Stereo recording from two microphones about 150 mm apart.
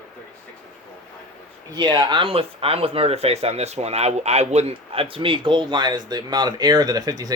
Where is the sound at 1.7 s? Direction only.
30° right (ahead or behind).